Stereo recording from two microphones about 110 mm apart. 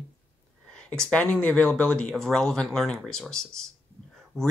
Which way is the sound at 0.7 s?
5° left (ahead or behind).